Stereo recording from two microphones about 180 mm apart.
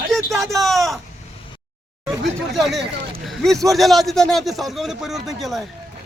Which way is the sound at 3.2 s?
Centre (ahead or behind).